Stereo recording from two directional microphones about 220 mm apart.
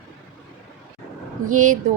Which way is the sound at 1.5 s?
35° right (ahead or behind).